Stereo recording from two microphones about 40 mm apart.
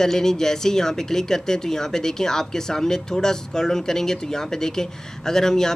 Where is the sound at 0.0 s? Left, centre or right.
Centre.